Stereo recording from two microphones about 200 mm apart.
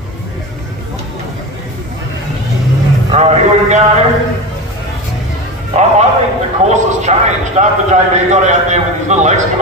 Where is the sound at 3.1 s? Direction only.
35° right (ahead or behind).